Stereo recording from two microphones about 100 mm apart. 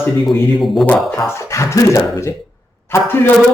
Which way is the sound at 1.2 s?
30° left (ahead or behind).